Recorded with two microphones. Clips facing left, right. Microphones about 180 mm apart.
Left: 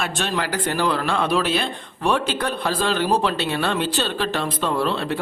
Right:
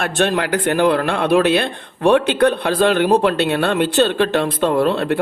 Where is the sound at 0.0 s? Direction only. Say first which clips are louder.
Right 7 dB; 55° right (ahead or behind).